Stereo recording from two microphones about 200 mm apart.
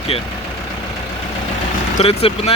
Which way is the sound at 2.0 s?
30° left (ahead or behind).